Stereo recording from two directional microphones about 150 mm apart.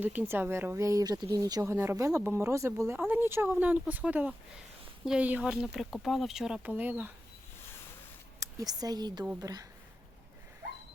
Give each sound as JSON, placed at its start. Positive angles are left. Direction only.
{"t": 0.0, "sound": "speech", "side_deg": -10}
{"t": 8.4, "sound": "speech", "side_deg": -25}